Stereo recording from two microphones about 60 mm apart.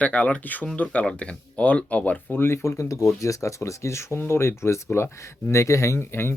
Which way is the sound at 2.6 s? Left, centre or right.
Left.